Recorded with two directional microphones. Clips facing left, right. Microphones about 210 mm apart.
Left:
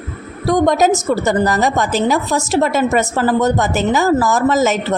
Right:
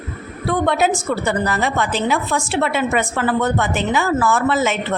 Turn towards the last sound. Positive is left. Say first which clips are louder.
# left 4 dB
turn(degrees=40)  # may be behind; listen again after turning